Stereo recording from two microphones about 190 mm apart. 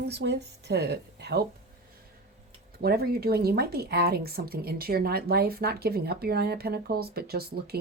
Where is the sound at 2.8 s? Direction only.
55° right (ahead or behind).